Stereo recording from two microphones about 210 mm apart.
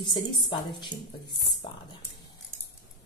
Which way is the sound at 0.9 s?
20° left (ahead or behind).